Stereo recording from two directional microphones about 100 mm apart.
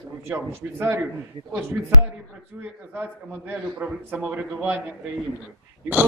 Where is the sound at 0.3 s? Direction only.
25° right (ahead or behind).